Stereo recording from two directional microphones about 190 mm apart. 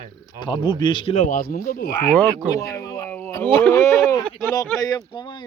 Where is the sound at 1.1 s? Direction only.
45° left (ahead or behind).